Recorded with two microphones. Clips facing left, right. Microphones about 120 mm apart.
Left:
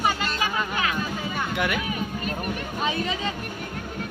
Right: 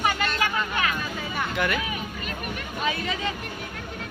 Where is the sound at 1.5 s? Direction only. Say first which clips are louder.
Right 1 dB; 15° left (ahead or behind).